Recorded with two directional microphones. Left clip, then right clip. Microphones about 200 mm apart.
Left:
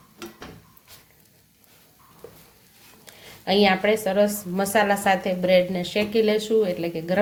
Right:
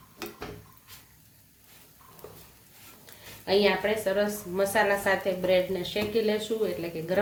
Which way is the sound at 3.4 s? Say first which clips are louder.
Left 4 dB; 45° left (ahead or behind).